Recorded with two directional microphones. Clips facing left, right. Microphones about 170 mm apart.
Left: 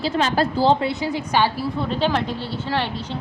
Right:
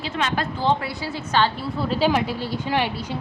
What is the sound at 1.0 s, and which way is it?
Speech, 15° left (ahead or behind).